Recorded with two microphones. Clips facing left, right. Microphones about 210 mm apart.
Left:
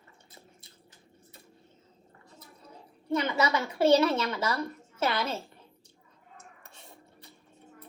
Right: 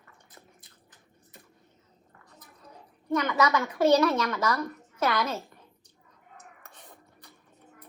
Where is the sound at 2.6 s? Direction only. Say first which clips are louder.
Right 2 dB; 25° left (ahead or behind).